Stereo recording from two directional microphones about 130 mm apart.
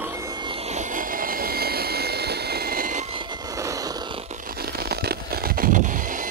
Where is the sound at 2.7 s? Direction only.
90° right.